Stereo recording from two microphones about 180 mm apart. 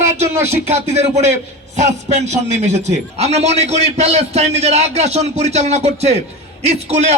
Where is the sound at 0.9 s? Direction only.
40° right (ahead or behind).